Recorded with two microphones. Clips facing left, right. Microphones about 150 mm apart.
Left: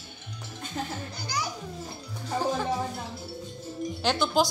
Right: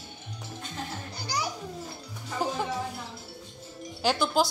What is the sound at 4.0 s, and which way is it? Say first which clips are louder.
Music: even; 5° right (ahead or behind).